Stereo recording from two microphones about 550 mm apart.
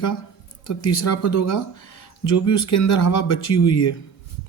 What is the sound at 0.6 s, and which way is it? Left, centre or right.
Speech, left.